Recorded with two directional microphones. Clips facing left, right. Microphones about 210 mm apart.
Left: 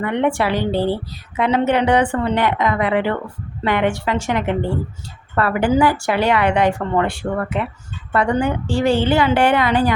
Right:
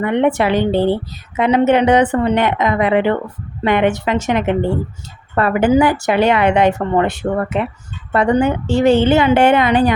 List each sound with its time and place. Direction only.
0.0 s a woman's voice: 20° right (ahead or behind)